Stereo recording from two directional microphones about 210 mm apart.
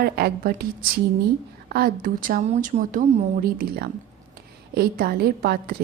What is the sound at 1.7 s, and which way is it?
A woman's voice, 45° right (ahead or behind).